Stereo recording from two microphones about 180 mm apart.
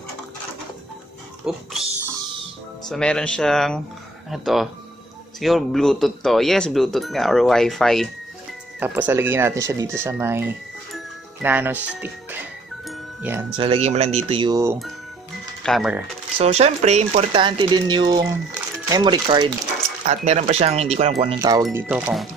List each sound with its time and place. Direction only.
1.4 s speech: centre (ahead or behind)
2.9 s speech: 5° left (ahead or behind)
8.7 s speech: 10° right (ahead or behind)
12.8 s music: 10° right (ahead or behind)
13.6 s speech: 35° right (ahead or behind); by 14.8 s 20° right (ahead or behind)
15.6 s speech: centre (ahead or behind)
16.3 s speech: 35° right (ahead or behind)
20.1 s speech: 35° right (ahead or behind)
21.4 s speech: 20° right (ahead or behind); by 22.3 s 5° right (ahead or behind)